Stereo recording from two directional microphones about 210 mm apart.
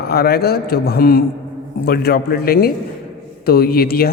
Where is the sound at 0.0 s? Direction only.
50° left (ahead or behind).